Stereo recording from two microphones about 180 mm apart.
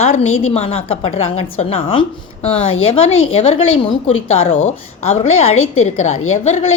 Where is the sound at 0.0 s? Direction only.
40° left (ahead or behind).